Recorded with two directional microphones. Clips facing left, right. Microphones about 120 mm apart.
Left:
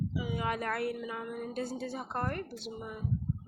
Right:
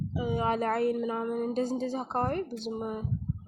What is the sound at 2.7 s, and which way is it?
Speech, 45° right (ahead or behind).